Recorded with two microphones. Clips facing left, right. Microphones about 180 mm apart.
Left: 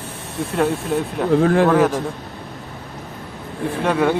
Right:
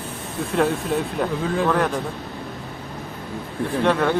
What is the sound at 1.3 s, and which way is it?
Speech, 65° left (ahead or behind).